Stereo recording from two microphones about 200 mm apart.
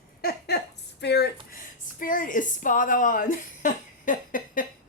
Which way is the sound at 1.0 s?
55° left (ahead or behind).